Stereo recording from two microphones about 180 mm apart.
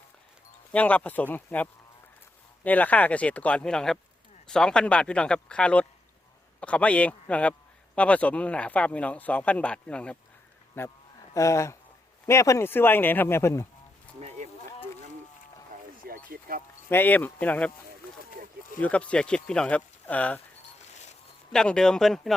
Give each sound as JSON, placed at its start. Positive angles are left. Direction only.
{"t": 0.7, "sound": "speech", "side_deg": 10}
{"t": 14.2, "sound": "a sound", "side_deg": -35}
{"t": 16.0, "sound": "a sound", "side_deg": -55}
{"t": 16.9, "sound": "speech", "side_deg": 10}
{"t": 18.8, "sound": "speech", "side_deg": 5}
{"t": 21.5, "sound": "speech", "side_deg": 5}